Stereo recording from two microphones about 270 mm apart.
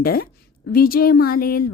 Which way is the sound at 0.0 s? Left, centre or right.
Left.